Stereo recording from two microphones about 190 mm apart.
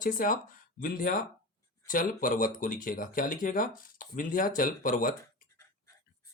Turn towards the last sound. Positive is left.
turn(degrees=45)  # may be behind; listen again after turning